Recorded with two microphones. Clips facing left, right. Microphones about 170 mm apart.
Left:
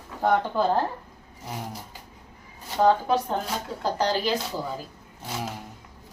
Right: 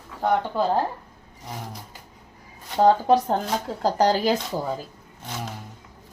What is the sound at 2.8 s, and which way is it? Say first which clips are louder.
Speech: right 3 dB; 35° right (ahead or behind).